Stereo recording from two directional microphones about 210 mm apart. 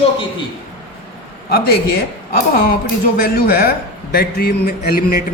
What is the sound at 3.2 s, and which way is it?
A man's voice, 45° left (ahead or behind).